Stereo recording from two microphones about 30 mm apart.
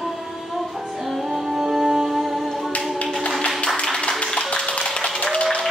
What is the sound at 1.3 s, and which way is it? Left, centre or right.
Music, centre.